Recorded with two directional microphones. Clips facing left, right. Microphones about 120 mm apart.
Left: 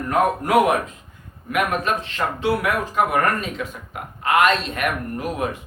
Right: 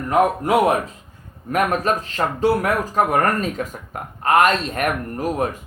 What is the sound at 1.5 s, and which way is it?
Speech, 40° right (ahead or behind).